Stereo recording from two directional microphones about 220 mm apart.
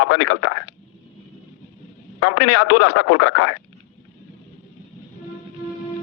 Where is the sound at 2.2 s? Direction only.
85° left.